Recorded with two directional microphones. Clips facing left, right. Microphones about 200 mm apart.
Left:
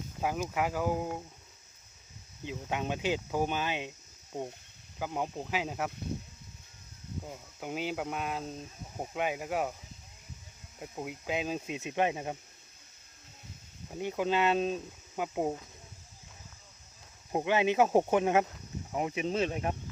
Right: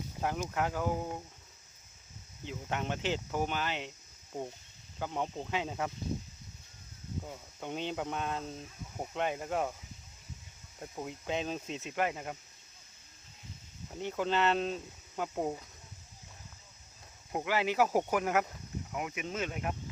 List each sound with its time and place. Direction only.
0.2 s speech: 10° left (ahead or behind)
2.4 s speech: 15° left (ahead or behind)
4.9 s speech: 10° left (ahead or behind)
7.3 s speech: 5° left (ahead or behind)
10.8 s speech: 10° left (ahead or behind)
14.0 s speech: 10° left (ahead or behind)
17.3 s speech: 20° left (ahead or behind)